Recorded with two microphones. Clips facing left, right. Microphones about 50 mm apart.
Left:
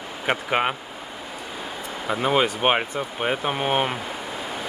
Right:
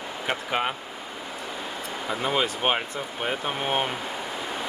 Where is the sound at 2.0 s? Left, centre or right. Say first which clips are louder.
Left 5 dB; centre.